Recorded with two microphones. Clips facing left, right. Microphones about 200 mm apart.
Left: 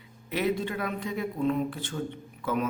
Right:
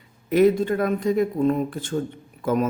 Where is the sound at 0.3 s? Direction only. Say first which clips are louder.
Right 11 dB; 45° right (ahead or behind).